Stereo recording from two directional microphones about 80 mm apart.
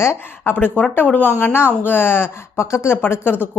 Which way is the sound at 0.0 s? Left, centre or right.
Left.